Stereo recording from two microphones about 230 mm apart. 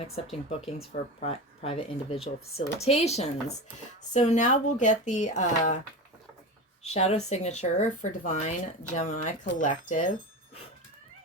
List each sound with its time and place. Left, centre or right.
0.3 s speech: left
6.8 s speech: left